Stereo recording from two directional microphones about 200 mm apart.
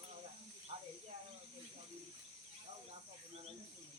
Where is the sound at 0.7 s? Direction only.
30° right (ahead or behind).